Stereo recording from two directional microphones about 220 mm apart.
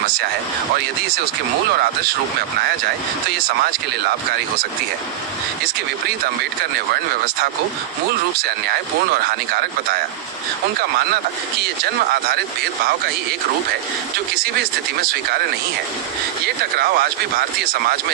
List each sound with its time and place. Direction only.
8.4 s speech: 45° right (ahead or behind)
14.6 s speech: 45° right (ahead or behind)
16.7 s speech: 45° right (ahead or behind)